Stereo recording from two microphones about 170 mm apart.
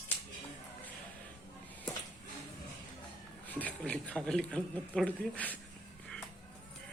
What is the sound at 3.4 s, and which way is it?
A man's voice, 10° left (ahead or behind).